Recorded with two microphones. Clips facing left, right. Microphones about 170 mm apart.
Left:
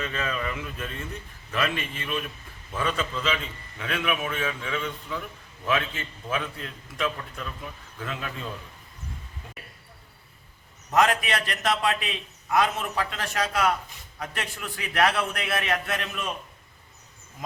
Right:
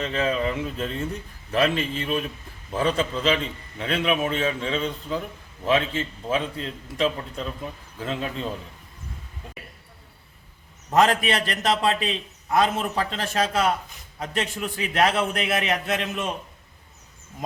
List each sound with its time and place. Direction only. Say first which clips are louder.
0.0 s a man's voice: right 6 dB; 25° right (ahead or behind)
10.9 s a man's voice: right 3 dB; 30° right (ahead or behind)